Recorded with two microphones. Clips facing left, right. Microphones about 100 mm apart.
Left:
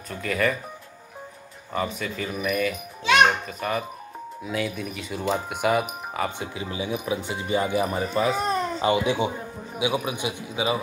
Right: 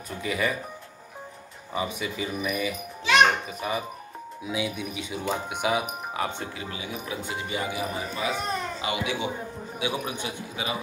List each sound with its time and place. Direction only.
0.1 s a child's voice: 5° right (ahead or behind)
1.7 s a child's voice: 5° right (ahead or behind)
6.6 s speech: 25° left (ahead or behind)
10.0 s a man's voice: 15° left (ahead or behind)